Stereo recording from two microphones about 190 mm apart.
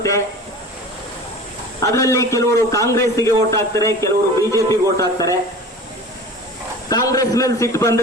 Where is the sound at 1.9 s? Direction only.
15° left (ahead or behind).